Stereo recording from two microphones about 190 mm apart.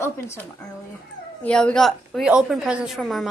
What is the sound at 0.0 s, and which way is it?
A woman's voice, 15° left (ahead or behind).